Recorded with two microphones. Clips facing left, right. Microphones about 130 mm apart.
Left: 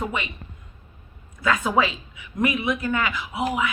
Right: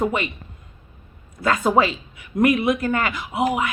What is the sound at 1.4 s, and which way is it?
A woman's voice, 40° right (ahead or behind).